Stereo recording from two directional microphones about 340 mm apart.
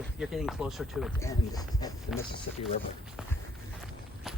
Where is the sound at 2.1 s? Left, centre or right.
Centre.